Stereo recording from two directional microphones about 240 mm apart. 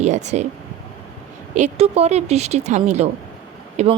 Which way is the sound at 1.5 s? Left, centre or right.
Right.